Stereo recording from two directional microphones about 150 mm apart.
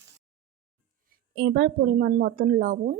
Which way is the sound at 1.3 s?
90° right.